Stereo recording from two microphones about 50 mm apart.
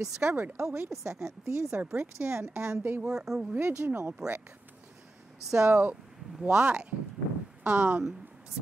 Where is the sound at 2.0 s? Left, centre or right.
Right.